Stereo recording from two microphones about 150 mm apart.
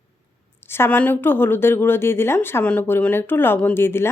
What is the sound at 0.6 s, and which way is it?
Speech, 15° left (ahead or behind).